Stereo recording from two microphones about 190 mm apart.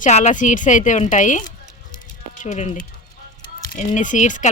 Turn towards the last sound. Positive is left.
turn(degrees=40)  # may be behind; listen again after turning